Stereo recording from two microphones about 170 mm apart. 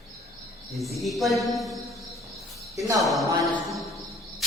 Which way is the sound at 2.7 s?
20° right (ahead or behind).